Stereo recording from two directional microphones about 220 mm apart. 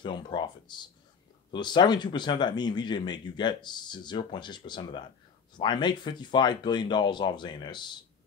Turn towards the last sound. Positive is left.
turn(degrees=20)  # may be behind; listen again after turning